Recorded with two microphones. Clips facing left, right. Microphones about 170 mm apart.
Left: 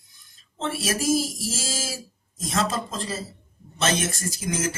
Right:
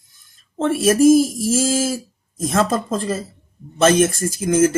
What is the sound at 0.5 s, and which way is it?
Speech, 50° right (ahead or behind).